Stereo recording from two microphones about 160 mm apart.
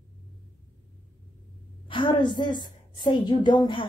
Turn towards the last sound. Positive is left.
turn(degrees=30)  # may be behind; listen again after turning